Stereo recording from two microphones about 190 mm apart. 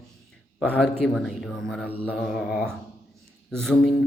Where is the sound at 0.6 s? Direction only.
5° right (ahead or behind).